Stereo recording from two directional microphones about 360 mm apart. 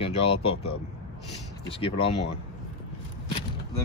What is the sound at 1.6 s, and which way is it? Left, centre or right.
Speech, centre.